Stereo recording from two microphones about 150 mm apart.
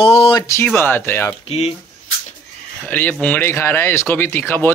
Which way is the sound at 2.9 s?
10° left (ahead or behind).